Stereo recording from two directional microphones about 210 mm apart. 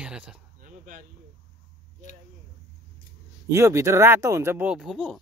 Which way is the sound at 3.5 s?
15° right (ahead or behind).